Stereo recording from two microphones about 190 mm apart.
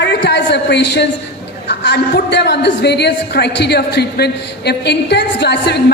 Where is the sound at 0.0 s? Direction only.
65° left (ahead or behind).